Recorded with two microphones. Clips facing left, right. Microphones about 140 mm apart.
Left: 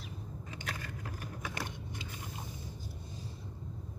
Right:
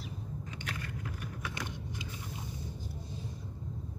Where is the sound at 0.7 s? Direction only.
40° left (ahead or behind).